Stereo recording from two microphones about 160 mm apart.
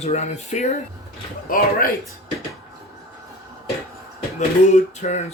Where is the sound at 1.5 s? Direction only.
65° left (ahead or behind).